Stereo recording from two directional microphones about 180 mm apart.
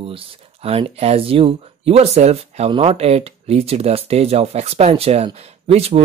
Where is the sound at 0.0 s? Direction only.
30° right (ahead or behind).